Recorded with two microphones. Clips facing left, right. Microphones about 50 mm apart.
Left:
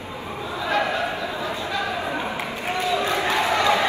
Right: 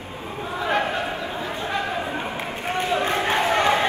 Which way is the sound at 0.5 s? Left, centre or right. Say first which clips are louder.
Right 1 dB; right.